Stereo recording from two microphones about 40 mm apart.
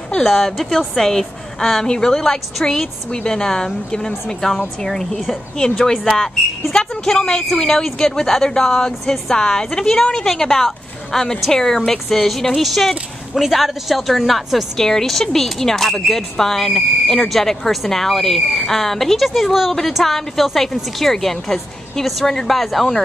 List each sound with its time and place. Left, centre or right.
0.2 s a woman's voice: centre
14.8 s a woman's voice: centre